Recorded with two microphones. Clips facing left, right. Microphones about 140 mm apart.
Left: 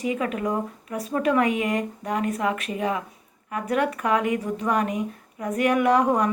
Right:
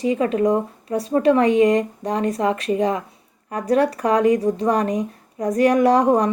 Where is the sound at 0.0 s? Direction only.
30° right (ahead or behind).